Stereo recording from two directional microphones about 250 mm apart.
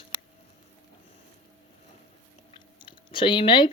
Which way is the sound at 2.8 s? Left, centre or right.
Centre.